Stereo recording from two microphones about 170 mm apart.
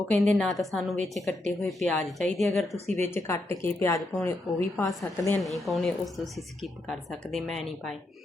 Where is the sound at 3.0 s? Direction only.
15° left (ahead or behind).